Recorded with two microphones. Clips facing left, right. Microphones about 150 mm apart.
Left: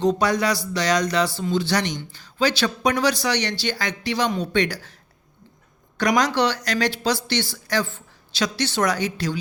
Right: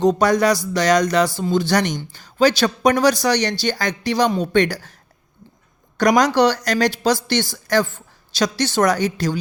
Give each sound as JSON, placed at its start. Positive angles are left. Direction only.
{"t": 0.0, "sound": "speech", "side_deg": -45}
{"t": 6.0, "sound": "speech", "side_deg": -45}